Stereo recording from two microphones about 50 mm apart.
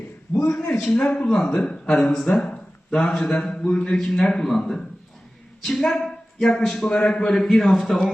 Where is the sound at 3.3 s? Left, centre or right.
Centre.